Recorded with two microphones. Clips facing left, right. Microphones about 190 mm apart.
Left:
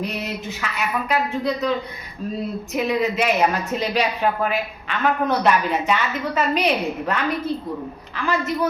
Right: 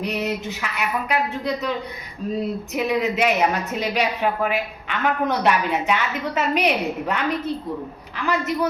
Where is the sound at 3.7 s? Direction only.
15° right (ahead or behind).